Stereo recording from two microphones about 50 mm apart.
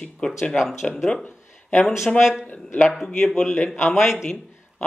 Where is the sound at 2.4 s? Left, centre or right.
Left.